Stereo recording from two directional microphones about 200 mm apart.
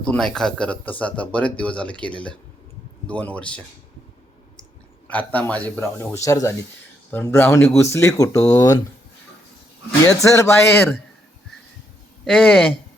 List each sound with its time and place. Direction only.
0.1 s speech: 5° left (ahead or behind)
5.0 s speech: 10° left (ahead or behind)
10.2 s speech: 15° left (ahead or behind)
12.2 s speech: centre (ahead or behind)